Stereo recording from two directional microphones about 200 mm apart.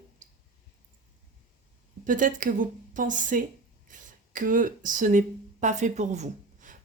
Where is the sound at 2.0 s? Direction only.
40° right (ahead or behind).